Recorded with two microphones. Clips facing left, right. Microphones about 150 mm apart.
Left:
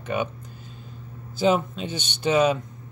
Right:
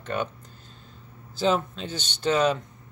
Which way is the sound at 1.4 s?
10° left (ahead or behind).